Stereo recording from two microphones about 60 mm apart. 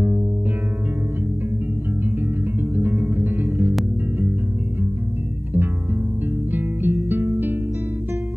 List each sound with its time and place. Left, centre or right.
3.3 s music: right
6.5 s music: right